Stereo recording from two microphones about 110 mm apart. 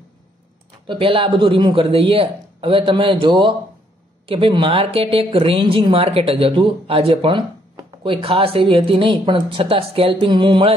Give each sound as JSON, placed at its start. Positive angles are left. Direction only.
{"t": 0.8, "sound": "speech", "side_deg": -55}